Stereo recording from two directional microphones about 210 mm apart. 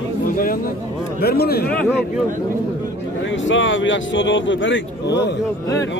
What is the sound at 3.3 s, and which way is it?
Speech, 60° left (ahead or behind).